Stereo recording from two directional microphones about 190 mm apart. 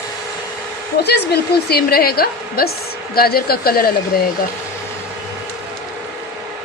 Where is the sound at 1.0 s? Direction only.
60° left (ahead or behind).